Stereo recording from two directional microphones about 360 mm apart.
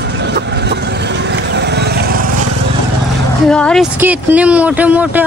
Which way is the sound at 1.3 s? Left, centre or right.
Right.